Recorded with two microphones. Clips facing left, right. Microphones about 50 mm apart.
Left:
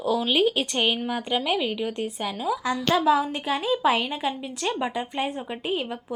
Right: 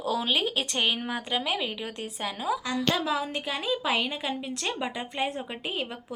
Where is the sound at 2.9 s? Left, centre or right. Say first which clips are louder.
Left 8 dB; centre.